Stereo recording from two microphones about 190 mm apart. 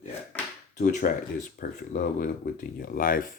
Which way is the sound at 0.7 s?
40° left (ahead or behind).